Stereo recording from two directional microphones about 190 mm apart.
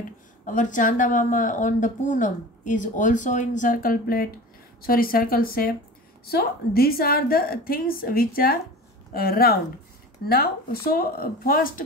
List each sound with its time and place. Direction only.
0.5 s speech: 40° left (ahead or behind)